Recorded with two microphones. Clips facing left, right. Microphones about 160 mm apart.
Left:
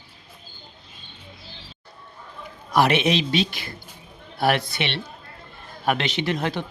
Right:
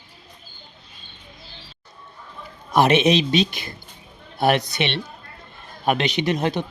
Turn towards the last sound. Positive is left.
turn(degrees=-20)  # may be behind; listen again after turning